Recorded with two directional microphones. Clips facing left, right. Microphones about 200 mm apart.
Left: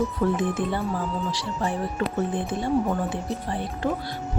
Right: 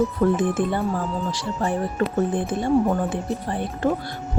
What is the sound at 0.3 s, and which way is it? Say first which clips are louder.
Speech: right 3 dB; 50° right (ahead or behind).